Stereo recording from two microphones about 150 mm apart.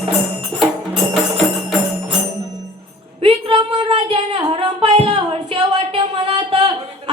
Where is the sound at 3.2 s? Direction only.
35° right (ahead or behind).